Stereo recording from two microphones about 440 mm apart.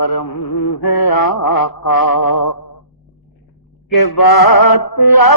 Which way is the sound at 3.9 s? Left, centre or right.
Left.